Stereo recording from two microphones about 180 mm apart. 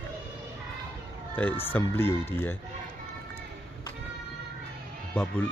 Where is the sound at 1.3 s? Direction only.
10° left (ahead or behind).